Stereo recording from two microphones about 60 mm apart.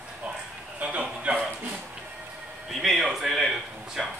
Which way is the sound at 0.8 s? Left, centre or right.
Right.